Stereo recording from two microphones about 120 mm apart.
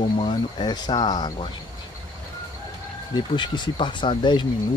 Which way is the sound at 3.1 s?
40° left (ahead or behind).